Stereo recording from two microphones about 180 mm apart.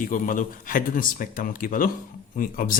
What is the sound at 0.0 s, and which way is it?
A man's voice, 50° left (ahead or behind).